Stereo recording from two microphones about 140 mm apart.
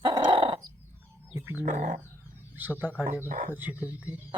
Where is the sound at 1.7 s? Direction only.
75° right (ahead or behind).